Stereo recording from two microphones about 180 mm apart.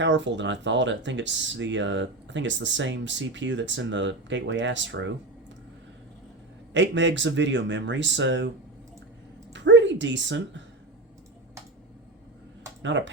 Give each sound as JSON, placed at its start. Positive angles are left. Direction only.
{"t": 0.0, "sound": "speech", "side_deg": -85}
{"t": 6.7, "sound": "speech", "side_deg": -90}
{"t": 9.5, "sound": "a sound", "side_deg": -85}